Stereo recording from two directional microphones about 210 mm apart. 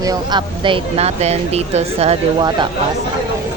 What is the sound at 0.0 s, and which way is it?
Speech, 20° right (ahead or behind).